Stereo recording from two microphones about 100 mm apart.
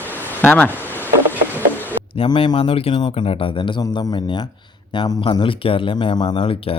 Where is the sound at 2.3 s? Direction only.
65° left (ahead or behind).